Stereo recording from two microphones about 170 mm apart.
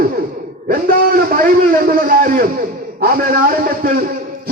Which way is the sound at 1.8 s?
55° right (ahead or behind).